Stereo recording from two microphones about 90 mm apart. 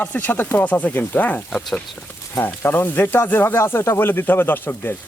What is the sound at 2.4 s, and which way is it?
Speech, 25° left (ahead or behind).